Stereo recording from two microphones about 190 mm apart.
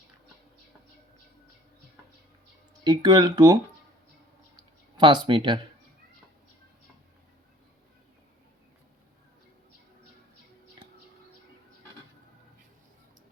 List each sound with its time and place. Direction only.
2.8 s speech: 20° right (ahead or behind)
4.9 s speech: 25° right (ahead or behind)